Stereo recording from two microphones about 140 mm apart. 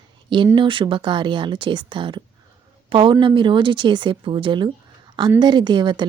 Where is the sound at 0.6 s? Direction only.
35° right (ahead or behind).